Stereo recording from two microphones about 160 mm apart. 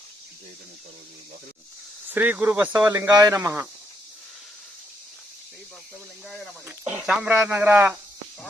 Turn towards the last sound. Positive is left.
turn(degrees=-15)  # may be behind; listen again after turning